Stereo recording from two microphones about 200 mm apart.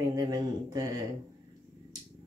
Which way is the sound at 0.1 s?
20° right (ahead or behind).